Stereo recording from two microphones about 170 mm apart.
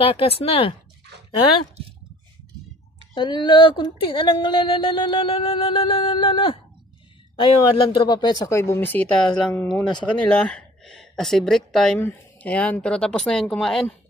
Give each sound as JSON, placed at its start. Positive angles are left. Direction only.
{"t": 0.0, "sound": "speech", "side_deg": 35}
{"t": 3.2, "sound": "a woman's voice", "side_deg": 30}